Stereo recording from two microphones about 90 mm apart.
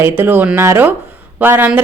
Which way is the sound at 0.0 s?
25° right (ahead or behind).